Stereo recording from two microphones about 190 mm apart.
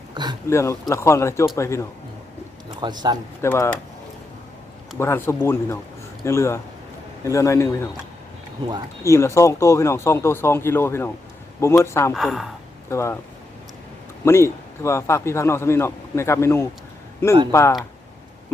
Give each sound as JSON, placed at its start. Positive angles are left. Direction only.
{"t": 0.1, "sound": "a sound", "side_deg": -20}
{"t": 0.4, "sound": "a man's voice", "side_deg": 15}
{"t": 2.6, "sound": "a man's voice", "side_deg": -20}
{"t": 3.4, "sound": "a man's voice", "side_deg": 15}
{"t": 4.9, "sound": "a man's voice", "side_deg": 15}
{"t": 9.0, "sound": "a man's voice", "side_deg": 15}
{"t": 12.1, "sound": "speech", "side_deg": 0}
{"t": 12.9, "sound": "a man's voice", "side_deg": 15}
{"t": 14.3, "sound": "a man's voice", "side_deg": 15}